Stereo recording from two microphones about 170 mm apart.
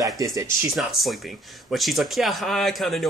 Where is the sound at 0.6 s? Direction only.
Centre (ahead or behind).